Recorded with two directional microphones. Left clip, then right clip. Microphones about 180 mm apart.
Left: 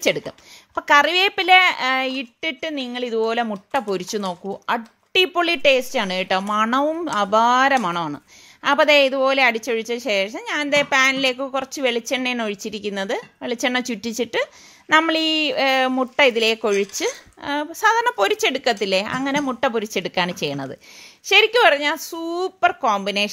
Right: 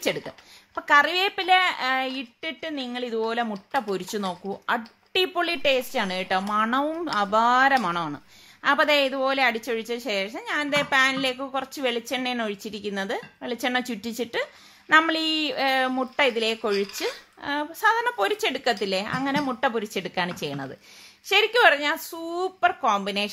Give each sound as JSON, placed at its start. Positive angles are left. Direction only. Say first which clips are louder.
{"t": 0.7, "sound": "a woman's voice", "louder": "left 4 dB", "side_deg": 35}